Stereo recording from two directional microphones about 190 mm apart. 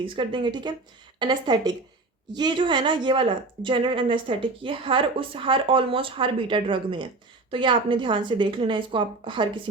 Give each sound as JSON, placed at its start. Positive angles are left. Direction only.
{"t": 0.0, "sound": "a woman's voice", "side_deg": -25}